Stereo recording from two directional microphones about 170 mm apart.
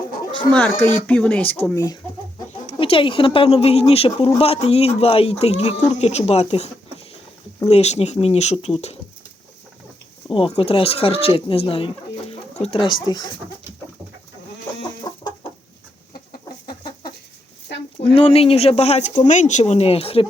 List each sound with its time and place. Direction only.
0.5 s speech: 10° left (ahead or behind)
1.7 s speech: 20° left (ahead or behind)
2.6 s speech: 35° left (ahead or behind)
7.7 s speech: 40° left (ahead or behind)
10.3 s speech: 30° left (ahead or behind)
15.1 s chicken: 20° left (ahead or behind)
16.3 s chicken: 25° left (ahead or behind)
18.0 s speech: 35° left (ahead or behind)